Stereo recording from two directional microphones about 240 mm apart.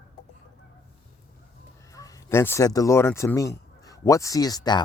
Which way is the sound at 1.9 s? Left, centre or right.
Centre.